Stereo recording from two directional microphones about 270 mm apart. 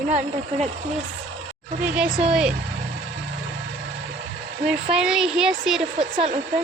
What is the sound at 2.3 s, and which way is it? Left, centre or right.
Speech, centre.